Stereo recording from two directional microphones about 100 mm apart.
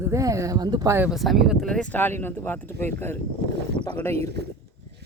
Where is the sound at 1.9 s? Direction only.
20° left (ahead or behind).